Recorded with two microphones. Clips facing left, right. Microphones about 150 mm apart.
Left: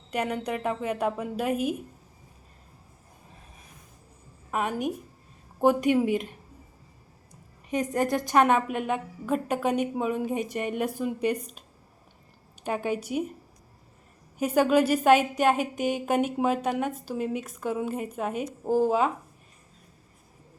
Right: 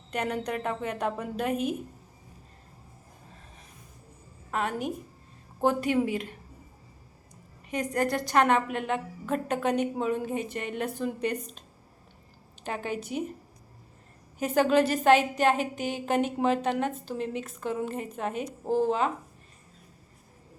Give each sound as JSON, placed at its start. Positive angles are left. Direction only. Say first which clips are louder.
{"t": 0.1, "sound": "a woman's voice", "louder": "left 1 dB", "side_deg": 10}
{"t": 4.5, "sound": "a woman's voice", "louder": "left 2 dB", "side_deg": 15}
{"t": 7.7, "sound": "a woman's voice", "louder": "left 2 dB", "side_deg": 20}
{"t": 12.6, "sound": "a woman's voice", "louder": "left 4 dB", "side_deg": 15}
{"t": 14.3, "sound": "a woman's voice", "louder": "left 1 dB", "side_deg": 10}